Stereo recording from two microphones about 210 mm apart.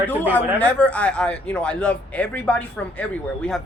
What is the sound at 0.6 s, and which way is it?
Speech, 5° left (ahead or behind).